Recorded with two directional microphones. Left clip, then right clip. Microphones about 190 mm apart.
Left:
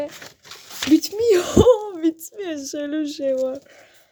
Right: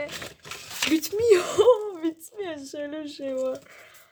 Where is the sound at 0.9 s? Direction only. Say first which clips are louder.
Left 4 dB; 30° left (ahead or behind).